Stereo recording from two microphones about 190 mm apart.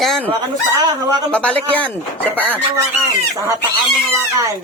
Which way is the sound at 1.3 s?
5° left (ahead or behind).